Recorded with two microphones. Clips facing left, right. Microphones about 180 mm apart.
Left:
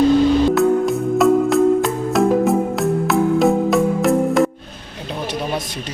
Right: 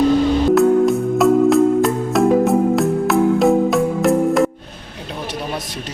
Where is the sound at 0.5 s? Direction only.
Centre (ahead or behind).